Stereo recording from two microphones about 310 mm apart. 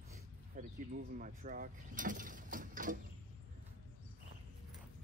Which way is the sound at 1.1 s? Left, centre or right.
Right.